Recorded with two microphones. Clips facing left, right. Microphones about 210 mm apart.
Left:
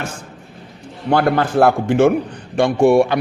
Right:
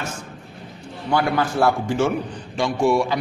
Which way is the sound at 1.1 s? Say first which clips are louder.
Left 5 dB; 55° left (ahead or behind).